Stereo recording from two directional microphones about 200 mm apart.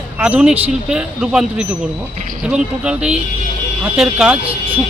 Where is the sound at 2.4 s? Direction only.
5° right (ahead or behind).